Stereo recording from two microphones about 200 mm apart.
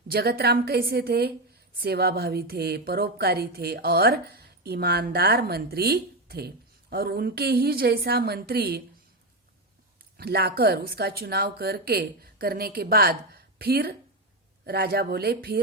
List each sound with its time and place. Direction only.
0.1 s a woman's voice: 50° right (ahead or behind)
10.2 s a woman's voice: 50° right (ahead or behind)